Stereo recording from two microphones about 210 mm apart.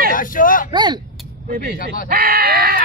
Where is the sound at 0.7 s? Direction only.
20° right (ahead or behind).